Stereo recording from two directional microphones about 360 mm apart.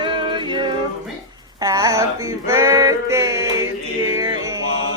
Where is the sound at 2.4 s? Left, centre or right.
Centre.